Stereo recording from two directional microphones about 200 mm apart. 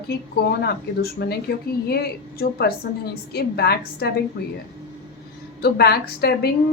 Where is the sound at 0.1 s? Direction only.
50° left (ahead or behind).